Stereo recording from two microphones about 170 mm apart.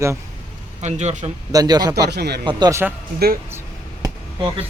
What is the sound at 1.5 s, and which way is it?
Speech, 20° right (ahead or behind).